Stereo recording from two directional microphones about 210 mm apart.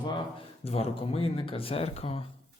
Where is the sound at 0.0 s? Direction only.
25° left (ahead or behind).